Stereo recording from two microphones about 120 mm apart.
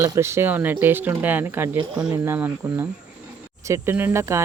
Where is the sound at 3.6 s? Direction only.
20° right (ahead or behind).